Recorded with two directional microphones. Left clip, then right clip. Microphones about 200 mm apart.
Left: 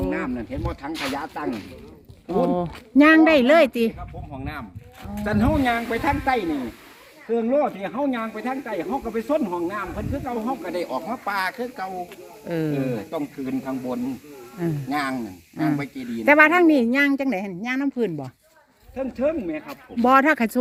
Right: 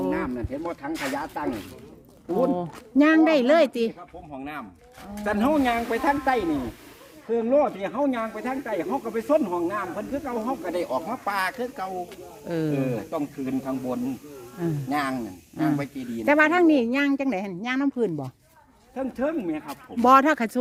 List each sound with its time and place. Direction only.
0.1 s speech: 30° left (ahead or behind)
2.4 s speech: 20° left (ahead or behind)
4.4 s speech: centre (ahead or behind); by 6.4 s 20° right (ahead or behind)
7.3 s speech: centre (ahead or behind)
12.7 s speech: 15° right (ahead or behind)
16.2 s speech: 10° left (ahead or behind); by 18.3 s 5° right (ahead or behind)
18.9 s speech: 55° right (ahead or behind)
20.1 s speech: 5° left (ahead or behind)